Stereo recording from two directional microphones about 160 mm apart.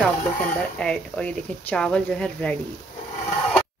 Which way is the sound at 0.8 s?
5° left (ahead or behind).